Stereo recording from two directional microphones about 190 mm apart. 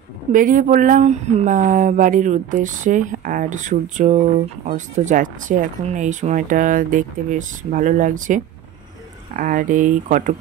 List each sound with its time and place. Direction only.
0.3 s speech: 45° right (ahead or behind)
9.4 s speech: 45° right (ahead or behind)